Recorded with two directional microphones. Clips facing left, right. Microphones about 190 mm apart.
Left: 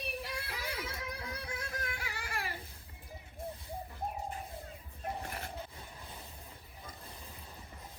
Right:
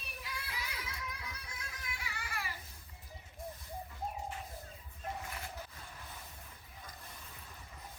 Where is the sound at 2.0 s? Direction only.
55° left (ahead or behind).